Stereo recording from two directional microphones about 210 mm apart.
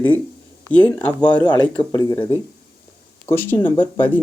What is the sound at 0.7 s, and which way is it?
Speech, 5° left (ahead or behind).